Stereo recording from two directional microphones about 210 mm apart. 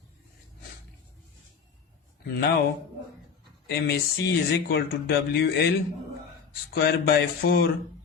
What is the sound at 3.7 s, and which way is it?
Speech, 50° left (ahead or behind).